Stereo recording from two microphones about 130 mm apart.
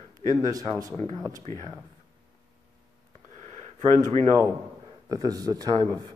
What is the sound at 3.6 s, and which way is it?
Speech, 55° right (ahead or behind).